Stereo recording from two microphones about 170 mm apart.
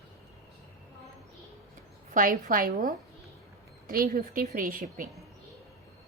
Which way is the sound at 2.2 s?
55° right (ahead or behind).